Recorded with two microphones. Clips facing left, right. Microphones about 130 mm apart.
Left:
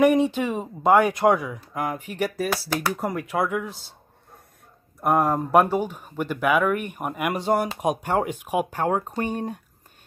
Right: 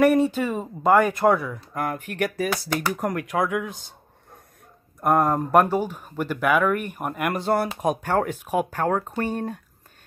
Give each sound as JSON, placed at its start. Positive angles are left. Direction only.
{"t": 0.0, "sound": "speech", "side_deg": -5}
{"t": 0.4, "sound": "speech", "side_deg": 10}
{"t": 3.5, "sound": "speech", "side_deg": -15}
{"t": 5.0, "sound": "speech", "side_deg": 5}